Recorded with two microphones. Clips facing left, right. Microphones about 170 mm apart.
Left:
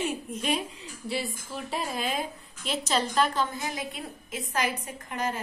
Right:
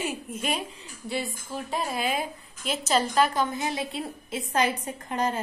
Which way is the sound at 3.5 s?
30° right (ahead or behind).